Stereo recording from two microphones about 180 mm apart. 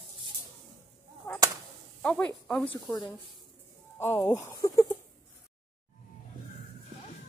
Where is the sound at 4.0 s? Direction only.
15° left (ahead or behind).